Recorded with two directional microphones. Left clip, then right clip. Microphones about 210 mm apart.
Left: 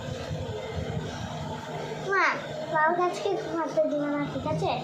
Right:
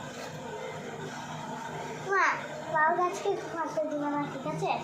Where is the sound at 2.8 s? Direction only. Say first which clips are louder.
Left 2 dB; 45° left (ahead or behind).